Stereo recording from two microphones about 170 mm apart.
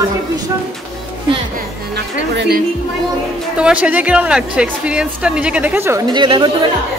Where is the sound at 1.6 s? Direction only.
80° right.